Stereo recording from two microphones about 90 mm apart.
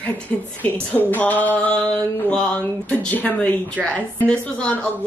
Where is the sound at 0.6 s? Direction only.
20° left (ahead or behind).